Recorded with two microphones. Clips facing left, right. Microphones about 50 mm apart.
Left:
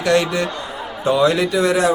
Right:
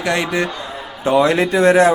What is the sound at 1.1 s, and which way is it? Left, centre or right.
Speech, right.